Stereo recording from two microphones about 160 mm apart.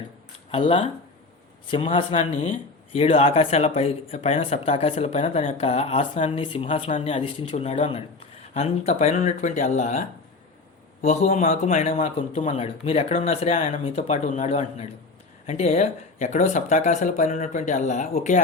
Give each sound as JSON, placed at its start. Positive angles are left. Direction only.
{"t": 0.5, "sound": "speech", "side_deg": 35}
{"t": 2.0, "sound": "speech", "side_deg": 35}
{"t": 11.0, "sound": "speech", "side_deg": 45}